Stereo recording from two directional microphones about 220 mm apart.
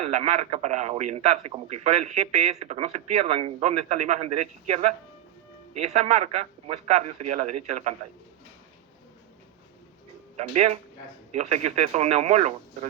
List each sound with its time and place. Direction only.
0.0 s a man's voice: 30° right (ahead or behind)
10.3 s speech: 30° right (ahead or behind)